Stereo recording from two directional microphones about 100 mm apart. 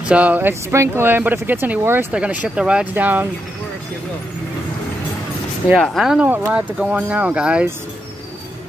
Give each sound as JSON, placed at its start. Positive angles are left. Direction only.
{"t": 0.0, "sound": "speech", "side_deg": -15}
{"t": 2.1, "sound": "speech", "side_deg": -10}
{"t": 5.8, "sound": "speech", "side_deg": 0}